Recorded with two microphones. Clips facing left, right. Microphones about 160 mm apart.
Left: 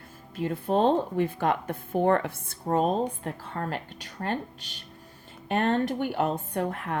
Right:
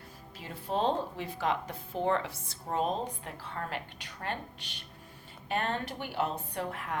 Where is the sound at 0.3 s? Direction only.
50° left (ahead or behind).